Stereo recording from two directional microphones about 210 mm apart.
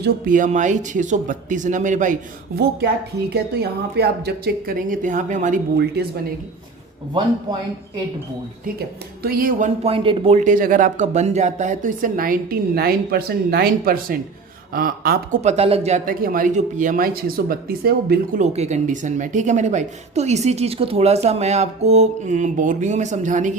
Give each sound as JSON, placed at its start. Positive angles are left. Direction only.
{"t": 0.0, "sound": "speech", "side_deg": -40}
{"t": 2.6, "sound": "a woman's voice", "side_deg": -50}
{"t": 9.2, "sound": "a woman's voice", "side_deg": -45}
{"t": 15.4, "sound": "speech", "side_deg": -30}